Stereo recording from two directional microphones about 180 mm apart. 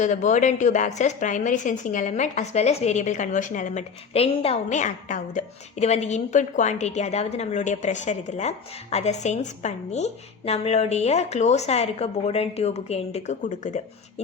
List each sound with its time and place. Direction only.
0.0 s a woman's voice: 40° left (ahead or behind)